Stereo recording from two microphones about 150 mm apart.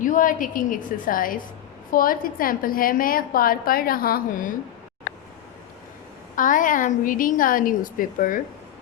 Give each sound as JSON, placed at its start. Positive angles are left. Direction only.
{"t": 0.0, "sound": "a woman's voice", "side_deg": 60}
{"t": 6.3, "sound": "a woman's voice", "side_deg": 60}